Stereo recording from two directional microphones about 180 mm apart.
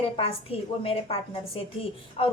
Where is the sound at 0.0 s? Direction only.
30° left (ahead or behind).